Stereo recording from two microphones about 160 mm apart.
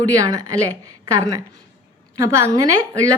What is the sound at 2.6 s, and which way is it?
Speech, 20° right (ahead or behind).